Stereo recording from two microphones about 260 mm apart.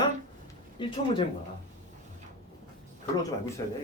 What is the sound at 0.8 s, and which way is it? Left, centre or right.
Speech, centre.